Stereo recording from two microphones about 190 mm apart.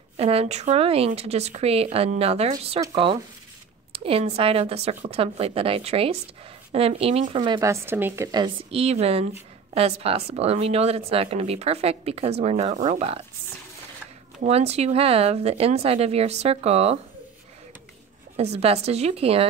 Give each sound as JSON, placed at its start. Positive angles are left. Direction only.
{"t": 0.2, "sound": "speech", "side_deg": -30}
{"t": 2.8, "sound": "speech", "side_deg": -20}
{"t": 14.4, "sound": "speech", "side_deg": -35}
{"t": 18.3, "sound": "speech", "side_deg": -35}